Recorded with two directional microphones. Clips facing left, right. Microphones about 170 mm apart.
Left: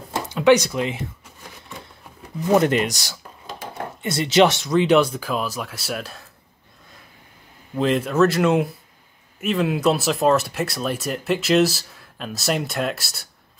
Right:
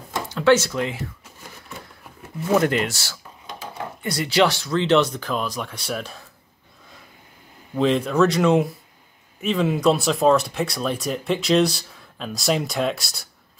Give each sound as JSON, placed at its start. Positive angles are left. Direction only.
{"t": 0.3, "sound": "speech", "side_deg": 15}
{"t": 2.5, "sound": "speech", "side_deg": 20}
{"t": 7.7, "sound": "speech", "side_deg": 0}